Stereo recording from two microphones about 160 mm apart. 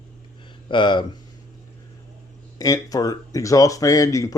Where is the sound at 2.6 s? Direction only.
20° left (ahead or behind).